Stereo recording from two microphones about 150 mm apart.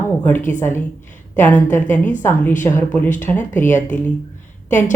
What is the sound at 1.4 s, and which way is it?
Speech, 15° left (ahead or behind).